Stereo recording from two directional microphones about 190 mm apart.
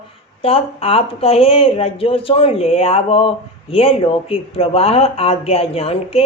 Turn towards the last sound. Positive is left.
turn(degrees=30)  # may be behind; listen again after turning